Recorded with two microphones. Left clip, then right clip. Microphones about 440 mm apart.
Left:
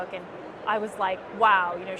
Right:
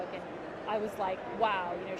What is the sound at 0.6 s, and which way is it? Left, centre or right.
Speech, left.